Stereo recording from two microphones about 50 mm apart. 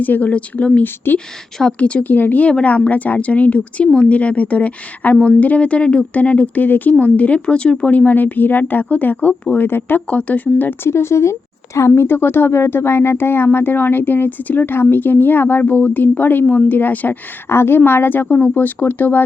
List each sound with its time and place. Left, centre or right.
0.0 s speech: left
0.8 s speech: left
1.8 s speech: left
2.0 s speech: left
7.9 s speech: left
9.6 s speech: left
10.1 s speech: left
10.8 s a woman's voice: left
11.9 s speech: left
17.5 s speech: left